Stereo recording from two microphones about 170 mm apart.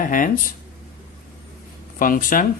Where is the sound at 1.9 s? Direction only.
55° left (ahead or behind).